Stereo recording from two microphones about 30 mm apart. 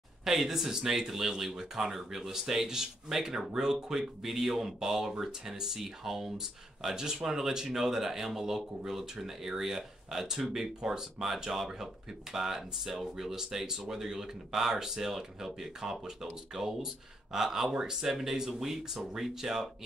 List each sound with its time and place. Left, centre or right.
0.2 s speech: centre